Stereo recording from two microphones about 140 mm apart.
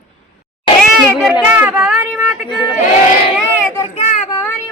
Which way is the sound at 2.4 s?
30° left (ahead or behind).